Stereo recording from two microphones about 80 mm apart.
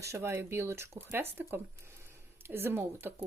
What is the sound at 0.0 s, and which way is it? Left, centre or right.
Speech, right.